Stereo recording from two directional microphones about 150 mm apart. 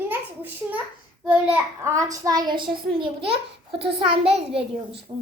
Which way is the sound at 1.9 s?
25° right (ahead or behind).